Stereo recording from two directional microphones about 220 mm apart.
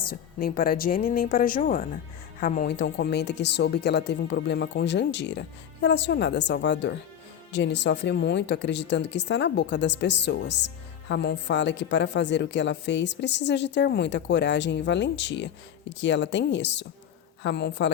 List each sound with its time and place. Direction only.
0.1 s speech: 40° left (ahead or behind)
2.7 s speech: 50° left (ahead or behind)